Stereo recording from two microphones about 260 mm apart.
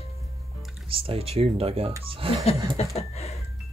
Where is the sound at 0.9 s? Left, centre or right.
Right.